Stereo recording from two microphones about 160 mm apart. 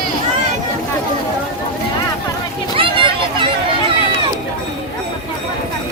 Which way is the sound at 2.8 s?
30° right (ahead or behind).